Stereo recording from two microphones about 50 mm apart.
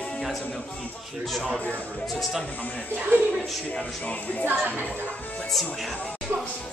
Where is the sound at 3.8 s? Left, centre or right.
Left.